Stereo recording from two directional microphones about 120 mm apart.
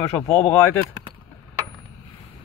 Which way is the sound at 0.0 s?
20° left (ahead or behind).